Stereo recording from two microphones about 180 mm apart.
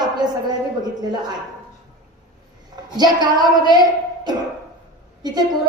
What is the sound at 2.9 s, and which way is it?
Speech, 25° right (ahead or behind).